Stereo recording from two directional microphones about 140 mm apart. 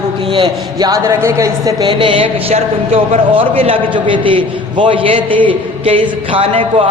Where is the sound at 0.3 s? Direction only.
30° right (ahead or behind).